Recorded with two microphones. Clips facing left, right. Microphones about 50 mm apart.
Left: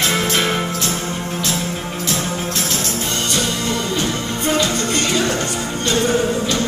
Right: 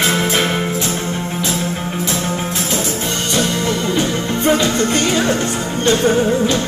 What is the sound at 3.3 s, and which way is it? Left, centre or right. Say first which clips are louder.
Music: right 5 dB; right.